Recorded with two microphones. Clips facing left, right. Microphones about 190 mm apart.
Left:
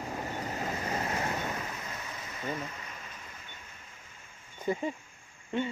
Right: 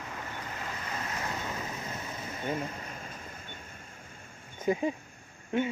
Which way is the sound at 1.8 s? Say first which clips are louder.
Right 3 dB; 25° right (ahead or behind).